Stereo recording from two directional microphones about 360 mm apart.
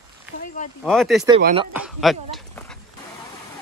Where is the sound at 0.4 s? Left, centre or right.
Left.